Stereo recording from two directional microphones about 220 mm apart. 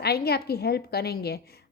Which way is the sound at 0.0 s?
45° left (ahead or behind).